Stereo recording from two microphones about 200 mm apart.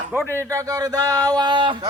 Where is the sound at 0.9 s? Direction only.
20° right (ahead or behind).